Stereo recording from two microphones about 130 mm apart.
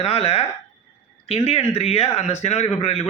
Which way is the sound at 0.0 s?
50° left (ahead or behind).